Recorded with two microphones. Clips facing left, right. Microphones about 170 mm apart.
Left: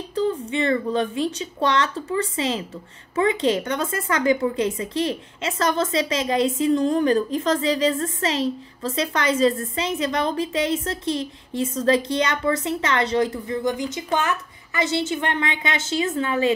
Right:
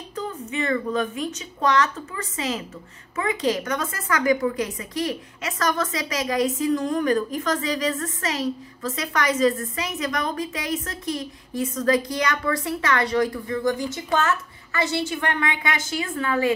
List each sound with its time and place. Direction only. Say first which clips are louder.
0.1 s a woman's voice: left 7 dB; 30° left (ahead or behind)